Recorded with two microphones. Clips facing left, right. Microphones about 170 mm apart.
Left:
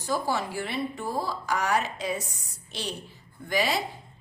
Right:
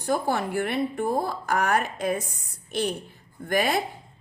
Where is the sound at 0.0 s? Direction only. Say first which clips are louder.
Right 3 dB; 55° right (ahead or behind).